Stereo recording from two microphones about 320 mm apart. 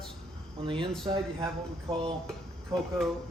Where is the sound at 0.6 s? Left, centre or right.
Centre.